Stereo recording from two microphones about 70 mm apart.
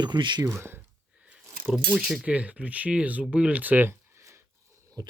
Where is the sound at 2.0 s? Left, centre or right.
Centre.